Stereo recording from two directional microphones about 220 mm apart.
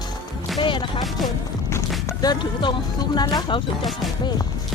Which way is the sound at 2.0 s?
20° left (ahead or behind).